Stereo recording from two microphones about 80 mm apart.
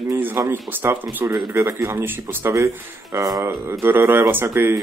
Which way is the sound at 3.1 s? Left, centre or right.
Right.